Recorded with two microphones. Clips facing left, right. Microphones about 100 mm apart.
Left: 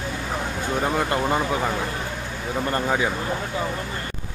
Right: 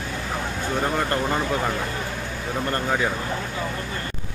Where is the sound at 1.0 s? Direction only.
10° left (ahead or behind).